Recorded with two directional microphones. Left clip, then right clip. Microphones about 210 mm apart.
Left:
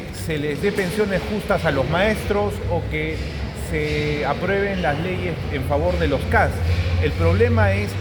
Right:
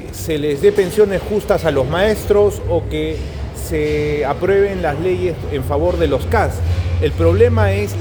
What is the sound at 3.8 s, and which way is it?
Speech, 60° right (ahead or behind).